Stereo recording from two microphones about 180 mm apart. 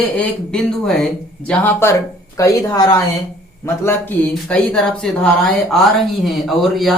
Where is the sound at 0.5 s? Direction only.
5° left (ahead or behind).